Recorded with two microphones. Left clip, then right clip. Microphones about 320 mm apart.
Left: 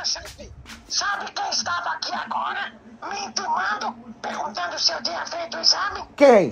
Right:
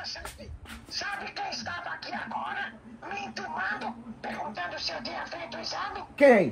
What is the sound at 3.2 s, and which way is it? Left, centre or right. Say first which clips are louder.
Speech: left 9 dB; left.